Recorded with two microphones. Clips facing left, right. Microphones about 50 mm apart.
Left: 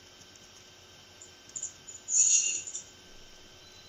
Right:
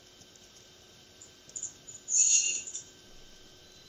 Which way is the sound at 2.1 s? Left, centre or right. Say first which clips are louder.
Right 1 dB; right.